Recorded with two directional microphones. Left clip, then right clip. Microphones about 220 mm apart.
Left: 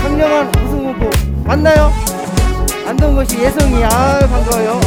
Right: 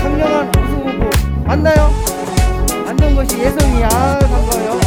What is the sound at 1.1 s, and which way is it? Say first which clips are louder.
Music: left 1 dB; 10° left (ahead or behind).